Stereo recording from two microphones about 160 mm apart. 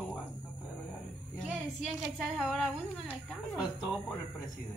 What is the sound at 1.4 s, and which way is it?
A woman's voice, 5° right (ahead or behind).